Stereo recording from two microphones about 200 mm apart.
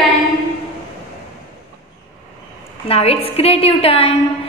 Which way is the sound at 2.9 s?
30° left (ahead or behind).